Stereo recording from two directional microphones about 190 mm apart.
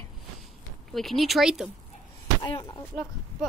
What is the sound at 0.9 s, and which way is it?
Speech, centre (ahead or behind).